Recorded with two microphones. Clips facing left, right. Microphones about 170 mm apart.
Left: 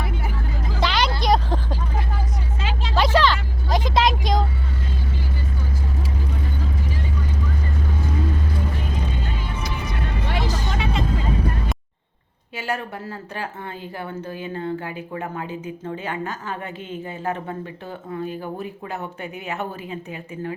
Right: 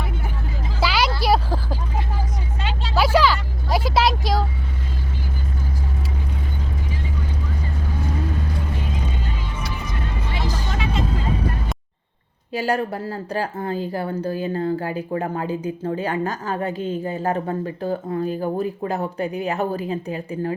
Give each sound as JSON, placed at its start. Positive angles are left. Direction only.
{"t": 0.8, "sound": "vehicle", "side_deg": -5}
{"t": 2.9, "sound": "vehicle", "side_deg": -5}
{"t": 12.5, "sound": "speech", "side_deg": -35}